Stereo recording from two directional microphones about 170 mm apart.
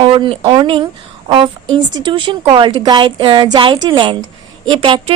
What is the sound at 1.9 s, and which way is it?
A woman's voice, 25° right (ahead or behind).